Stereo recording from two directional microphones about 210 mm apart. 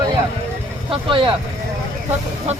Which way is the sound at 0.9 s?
25° right (ahead or behind).